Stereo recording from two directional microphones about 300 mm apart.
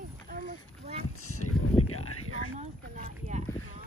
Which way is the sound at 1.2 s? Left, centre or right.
Left.